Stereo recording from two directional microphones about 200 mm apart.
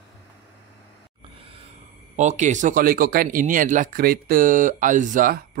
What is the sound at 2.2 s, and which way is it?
Speech, 35° right (ahead or behind).